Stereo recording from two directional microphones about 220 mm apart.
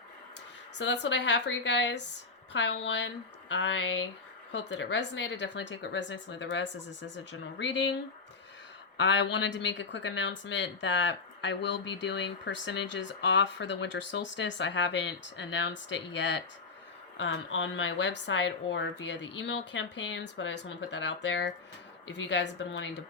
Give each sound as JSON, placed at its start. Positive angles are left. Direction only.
{"t": 0.8, "sound": "a woman's voice", "side_deg": 55}
{"t": 9.0, "sound": "a woman's voice", "side_deg": 55}